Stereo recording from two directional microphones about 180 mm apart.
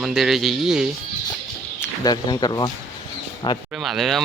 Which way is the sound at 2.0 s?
25° left (ahead or behind).